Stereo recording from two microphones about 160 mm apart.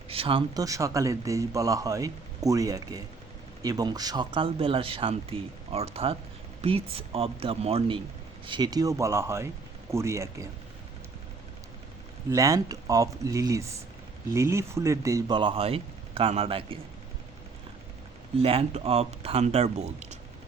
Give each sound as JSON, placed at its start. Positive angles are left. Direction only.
{"t": 0.1, "sound": "speech", "side_deg": -35}
{"t": 12.3, "sound": "speech", "side_deg": -20}
{"t": 15.4, "sound": "speech", "side_deg": -35}
{"t": 18.3, "sound": "speech", "side_deg": -35}